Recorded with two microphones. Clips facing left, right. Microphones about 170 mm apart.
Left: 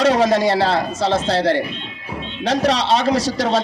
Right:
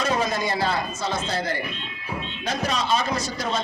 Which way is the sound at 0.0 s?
80° left.